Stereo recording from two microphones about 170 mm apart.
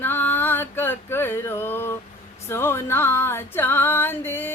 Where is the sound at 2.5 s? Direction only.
15° left (ahead or behind).